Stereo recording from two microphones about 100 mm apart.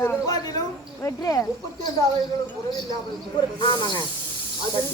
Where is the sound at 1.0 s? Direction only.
35° left (ahead or behind).